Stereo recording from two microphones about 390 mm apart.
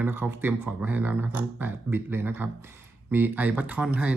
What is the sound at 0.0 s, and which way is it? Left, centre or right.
Speech, centre.